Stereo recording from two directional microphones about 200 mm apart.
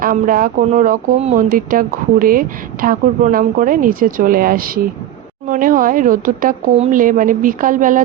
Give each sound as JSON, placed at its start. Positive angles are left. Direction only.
{"t": 0.0, "sound": "speech", "side_deg": -45}